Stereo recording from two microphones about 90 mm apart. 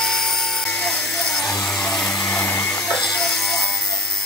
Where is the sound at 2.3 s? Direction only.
30° left (ahead or behind).